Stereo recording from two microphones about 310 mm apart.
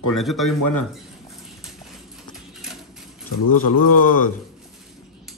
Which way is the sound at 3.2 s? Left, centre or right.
Left.